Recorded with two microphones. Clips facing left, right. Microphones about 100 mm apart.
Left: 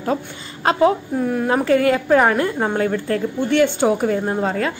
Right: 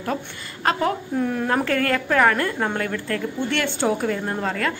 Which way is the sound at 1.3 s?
10° left (ahead or behind).